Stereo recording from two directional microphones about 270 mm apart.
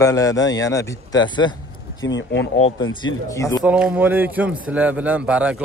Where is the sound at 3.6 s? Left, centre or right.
Centre.